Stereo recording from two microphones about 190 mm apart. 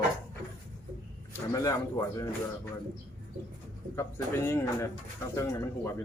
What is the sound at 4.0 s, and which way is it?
Speech, 15° left (ahead or behind).